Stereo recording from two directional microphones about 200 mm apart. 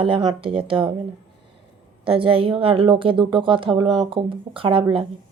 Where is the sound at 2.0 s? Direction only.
25° right (ahead or behind).